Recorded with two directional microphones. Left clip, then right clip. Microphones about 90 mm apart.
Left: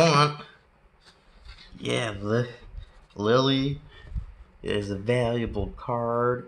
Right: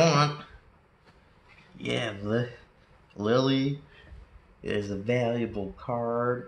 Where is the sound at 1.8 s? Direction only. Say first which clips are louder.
Left 2 dB; 55° left (ahead or behind).